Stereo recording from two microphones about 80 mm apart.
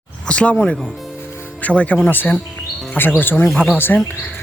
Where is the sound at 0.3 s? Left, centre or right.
Centre.